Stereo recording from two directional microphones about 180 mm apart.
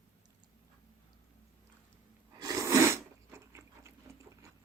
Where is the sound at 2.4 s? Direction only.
20° right (ahead or behind).